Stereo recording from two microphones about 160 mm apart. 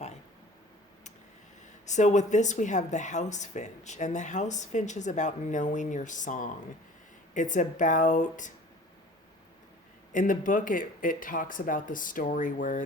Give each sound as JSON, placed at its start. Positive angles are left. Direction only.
{"t": 1.9, "sound": "a woman's voice", "side_deg": 50}
{"t": 10.1, "sound": "speech", "side_deg": 55}